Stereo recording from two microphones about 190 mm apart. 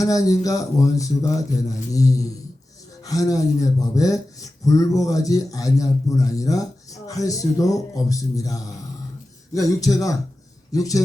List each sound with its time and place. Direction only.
0.0 s speech: 20° left (ahead or behind)